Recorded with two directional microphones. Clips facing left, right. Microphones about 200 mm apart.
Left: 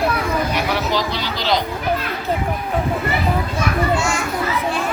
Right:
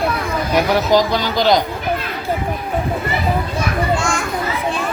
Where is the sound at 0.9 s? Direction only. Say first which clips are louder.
Right 7 dB; 45° right (ahead or behind).